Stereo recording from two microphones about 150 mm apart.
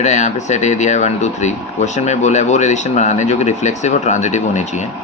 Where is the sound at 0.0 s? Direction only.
50° left (ahead or behind).